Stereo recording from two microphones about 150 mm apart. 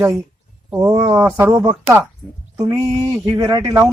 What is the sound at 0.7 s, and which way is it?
Speech, 20° right (ahead or behind).